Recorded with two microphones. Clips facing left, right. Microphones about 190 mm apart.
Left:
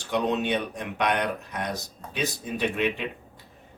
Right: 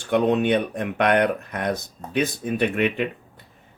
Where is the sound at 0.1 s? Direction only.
55° right (ahead or behind).